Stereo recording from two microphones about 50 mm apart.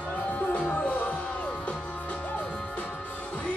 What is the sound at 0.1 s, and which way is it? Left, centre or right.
Music, left.